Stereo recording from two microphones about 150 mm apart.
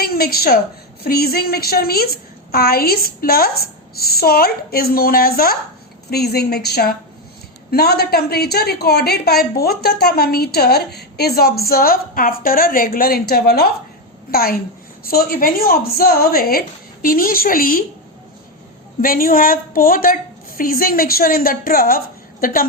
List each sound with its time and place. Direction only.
0.0 s a woman's voice: 90° left; by 17.8 s 70° left (ahead or behind)
19.0 s a woman's voice: 75° left (ahead or behind)